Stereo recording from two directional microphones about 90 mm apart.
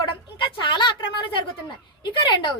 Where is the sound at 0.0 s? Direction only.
65° left (ahead or behind).